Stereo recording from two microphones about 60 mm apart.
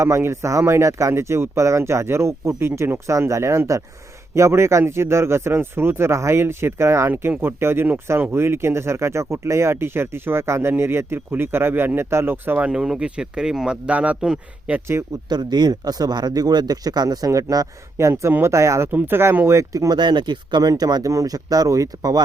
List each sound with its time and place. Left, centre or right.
0.0 s speech: right
7.1 s speech: right
12.8 s speech: centre; by 14.8 s right
15.7 s speech: right
17.9 s speech: right
18.9 s speech: right
19.5 s speech: right
20.6 s speech: right